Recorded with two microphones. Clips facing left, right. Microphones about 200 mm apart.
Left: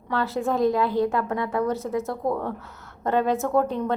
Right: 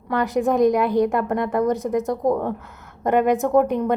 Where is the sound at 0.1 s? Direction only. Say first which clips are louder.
Right 5 dB; 15° right (ahead or behind).